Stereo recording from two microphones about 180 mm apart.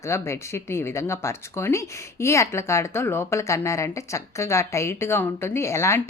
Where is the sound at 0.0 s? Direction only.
15° left (ahead or behind).